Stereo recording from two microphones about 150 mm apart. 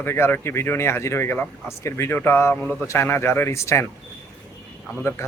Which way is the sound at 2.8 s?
15° left (ahead or behind).